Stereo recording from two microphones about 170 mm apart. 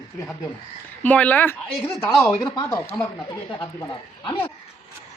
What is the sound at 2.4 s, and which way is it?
Speech, 20° left (ahead or behind).